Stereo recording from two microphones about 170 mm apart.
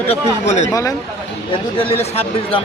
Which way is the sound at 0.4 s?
45° left (ahead or behind).